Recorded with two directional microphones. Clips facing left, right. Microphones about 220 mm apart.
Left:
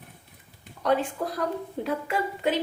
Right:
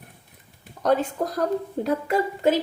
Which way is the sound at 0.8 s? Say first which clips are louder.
Right 3 dB; 40° right (ahead or behind).